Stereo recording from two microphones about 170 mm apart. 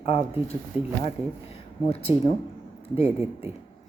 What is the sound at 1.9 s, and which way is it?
Speech, 35° left (ahead or behind).